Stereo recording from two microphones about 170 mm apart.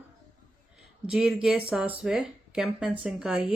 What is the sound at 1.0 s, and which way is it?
Speech, 5° right (ahead or behind).